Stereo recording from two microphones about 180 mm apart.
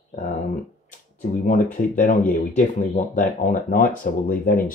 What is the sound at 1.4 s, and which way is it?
Speech, 45° left (ahead or behind).